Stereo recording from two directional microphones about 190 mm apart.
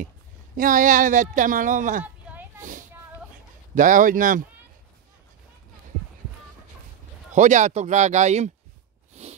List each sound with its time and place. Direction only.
0.6 s speech: 45° right (ahead or behind)
3.7 s speech: 45° right (ahead or behind)
7.3 s speech: 40° right (ahead or behind)
9.1 s a sound: 35° right (ahead or behind)